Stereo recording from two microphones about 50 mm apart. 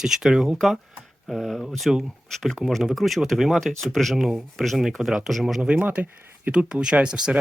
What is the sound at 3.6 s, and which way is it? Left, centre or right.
Speech, centre.